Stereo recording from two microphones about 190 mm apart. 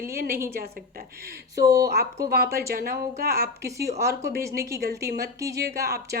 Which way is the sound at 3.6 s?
15° right (ahead or behind).